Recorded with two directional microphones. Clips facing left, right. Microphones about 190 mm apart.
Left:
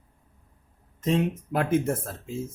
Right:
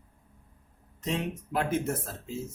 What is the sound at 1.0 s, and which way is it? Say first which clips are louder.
Speech: left 7 dB; 50° left (ahead or behind).